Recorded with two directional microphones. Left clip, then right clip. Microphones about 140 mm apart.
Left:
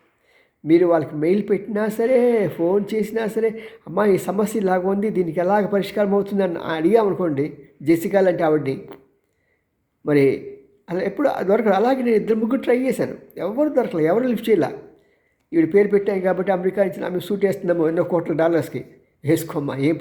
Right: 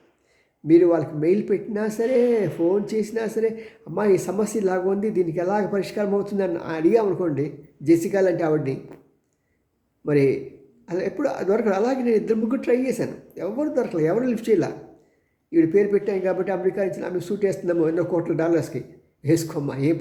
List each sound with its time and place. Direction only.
0.7 s speech: 20° left (ahead or behind)
10.1 s speech: 15° left (ahead or behind)